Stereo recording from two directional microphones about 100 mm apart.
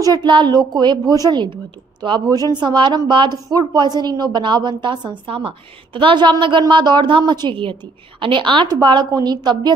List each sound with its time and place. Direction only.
0.0 s a woman's voice: 45° right (ahead or behind)
5.2 s a woman's voice: 65° right (ahead or behind)
5.9 s a woman's voice: 55° right (ahead or behind)